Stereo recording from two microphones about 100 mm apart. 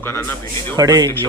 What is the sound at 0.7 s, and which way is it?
Speech, 40° right (ahead or behind).